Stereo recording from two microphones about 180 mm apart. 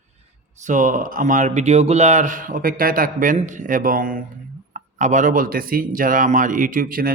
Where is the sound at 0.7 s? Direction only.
45° right (ahead or behind).